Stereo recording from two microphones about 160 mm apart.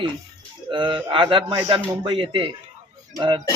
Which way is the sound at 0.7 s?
30° right (ahead or behind).